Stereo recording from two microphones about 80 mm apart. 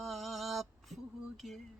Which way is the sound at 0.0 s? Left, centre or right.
Centre.